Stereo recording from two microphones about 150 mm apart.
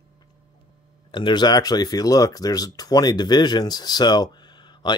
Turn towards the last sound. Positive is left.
turn(degrees=30)  # may be behind; listen again after turning